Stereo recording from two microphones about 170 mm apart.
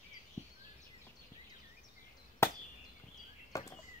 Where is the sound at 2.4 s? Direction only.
15° left (ahead or behind).